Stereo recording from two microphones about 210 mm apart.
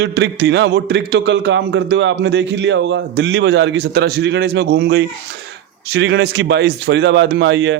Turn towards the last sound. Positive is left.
turn(degrees=-60)  # may be behind; listen again after turning